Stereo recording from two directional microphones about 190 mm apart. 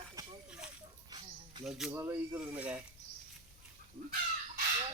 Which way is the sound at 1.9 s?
15° right (ahead or behind).